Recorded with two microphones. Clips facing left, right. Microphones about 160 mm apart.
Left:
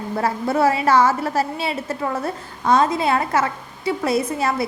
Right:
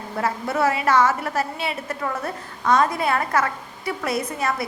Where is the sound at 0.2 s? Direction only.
30° left (ahead or behind).